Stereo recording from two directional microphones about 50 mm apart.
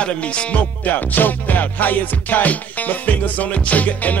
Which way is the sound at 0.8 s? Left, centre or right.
Left.